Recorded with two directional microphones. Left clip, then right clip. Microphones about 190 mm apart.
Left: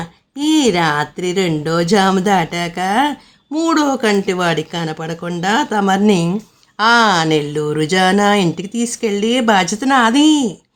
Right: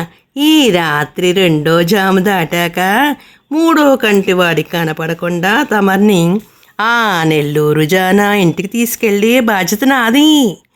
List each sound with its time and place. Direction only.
0.3 s speech: 30° right (ahead or behind)